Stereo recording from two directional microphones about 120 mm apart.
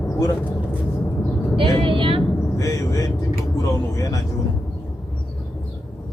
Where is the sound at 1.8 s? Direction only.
45° right (ahead or behind).